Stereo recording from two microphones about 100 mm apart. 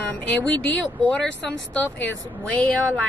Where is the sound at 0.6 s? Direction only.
10° left (ahead or behind).